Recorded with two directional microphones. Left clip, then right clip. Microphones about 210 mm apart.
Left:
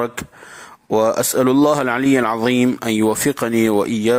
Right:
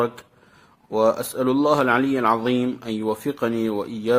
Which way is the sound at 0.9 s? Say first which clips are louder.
Left 4 dB; 35° left (ahead or behind).